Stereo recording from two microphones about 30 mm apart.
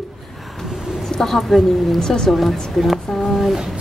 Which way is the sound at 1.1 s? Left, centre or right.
Centre.